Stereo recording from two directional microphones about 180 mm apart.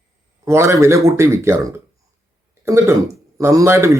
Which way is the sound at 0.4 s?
15° right (ahead or behind).